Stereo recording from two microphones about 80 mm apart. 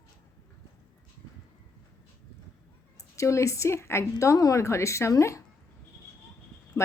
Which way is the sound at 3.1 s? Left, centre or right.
Left.